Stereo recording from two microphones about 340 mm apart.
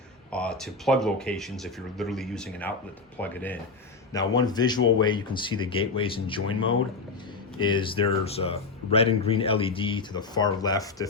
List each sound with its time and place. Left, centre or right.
0.3 s a man's voice: centre
7.6 s a man's voice: centre